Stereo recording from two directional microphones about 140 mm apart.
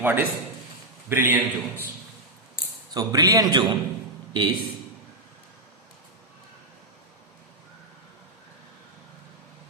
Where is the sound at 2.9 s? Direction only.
30° right (ahead or behind).